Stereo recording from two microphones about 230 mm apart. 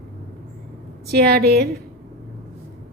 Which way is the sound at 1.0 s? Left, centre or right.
Right.